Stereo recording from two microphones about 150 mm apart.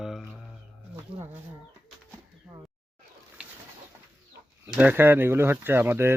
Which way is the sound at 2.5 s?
20° right (ahead or behind).